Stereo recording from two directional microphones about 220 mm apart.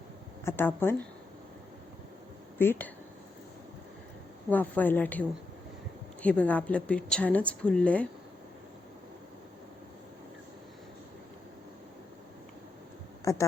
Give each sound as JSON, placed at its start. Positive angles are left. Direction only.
{"t": 0.4, "sound": "a woman's voice", "side_deg": 10}
{"t": 2.6, "sound": "a woman's voice", "side_deg": 10}
{"t": 4.4, "sound": "a woman's voice", "side_deg": 5}
{"t": 6.2, "sound": "a woman's voice", "side_deg": 5}
{"t": 13.2, "sound": "a woman's voice", "side_deg": 15}